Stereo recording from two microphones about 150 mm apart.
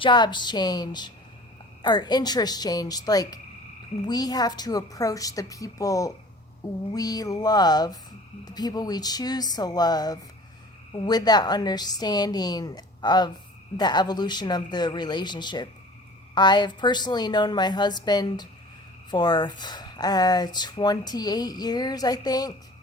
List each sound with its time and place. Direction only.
0.0 s speech: 30° left (ahead or behind)